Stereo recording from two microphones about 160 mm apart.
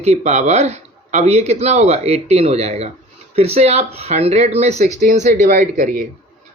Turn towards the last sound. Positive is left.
turn(degrees=-55)  # may be behind; listen again after turning